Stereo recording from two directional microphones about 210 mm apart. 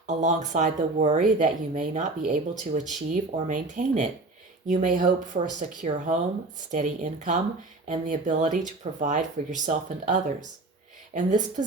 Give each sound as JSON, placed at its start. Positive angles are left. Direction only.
{"t": 0.1, "sound": "speech", "side_deg": -35}